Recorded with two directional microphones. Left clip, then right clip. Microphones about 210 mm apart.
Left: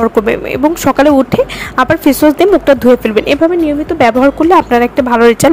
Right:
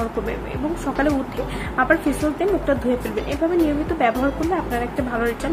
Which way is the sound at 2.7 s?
50° left (ahead or behind).